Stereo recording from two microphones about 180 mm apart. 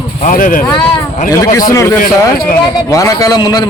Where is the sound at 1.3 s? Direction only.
20° left (ahead or behind).